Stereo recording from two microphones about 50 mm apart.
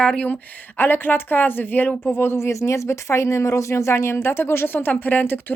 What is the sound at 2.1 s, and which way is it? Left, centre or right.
Speech, left.